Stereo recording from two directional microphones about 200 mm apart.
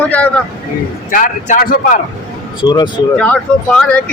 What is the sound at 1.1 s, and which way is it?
Speech, 45° left (ahead or behind).